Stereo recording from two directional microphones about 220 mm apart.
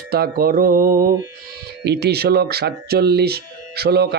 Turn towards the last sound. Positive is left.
turn(degrees=-45)  # may be behind; listen again after turning